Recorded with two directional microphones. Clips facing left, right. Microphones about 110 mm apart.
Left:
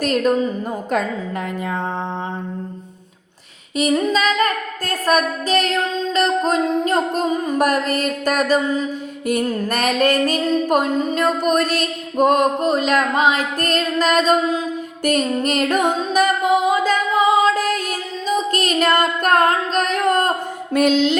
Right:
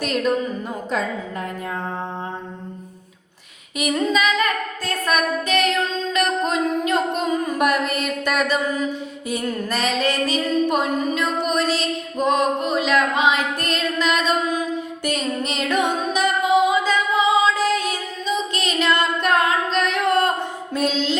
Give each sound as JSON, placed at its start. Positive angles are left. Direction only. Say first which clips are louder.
{"t": 3.8, "sound": "a sound", "louder": "left 3 dB", "side_deg": 35}
{"t": 9.3, "sound": "music", "louder": "left 4 dB", "side_deg": 55}
{"t": 18.3, "sound": "singing", "louder": "left 4 dB", "side_deg": 45}
{"t": 20.7, "sound": "music", "louder": "left 6 dB", "side_deg": 65}